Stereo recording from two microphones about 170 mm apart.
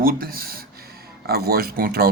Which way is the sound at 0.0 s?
60° right (ahead or behind).